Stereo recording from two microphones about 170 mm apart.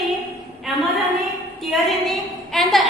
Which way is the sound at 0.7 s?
Centre (ahead or behind).